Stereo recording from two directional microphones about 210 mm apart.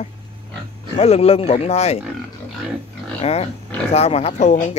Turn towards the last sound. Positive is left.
turn(degrees=30)  # may be behind; listen again after turning